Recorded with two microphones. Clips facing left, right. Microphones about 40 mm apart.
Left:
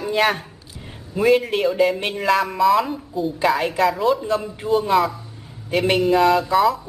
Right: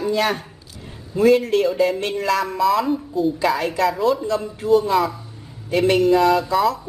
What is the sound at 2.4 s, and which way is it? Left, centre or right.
Speech, centre.